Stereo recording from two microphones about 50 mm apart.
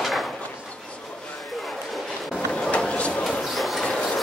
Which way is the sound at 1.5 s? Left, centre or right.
Centre.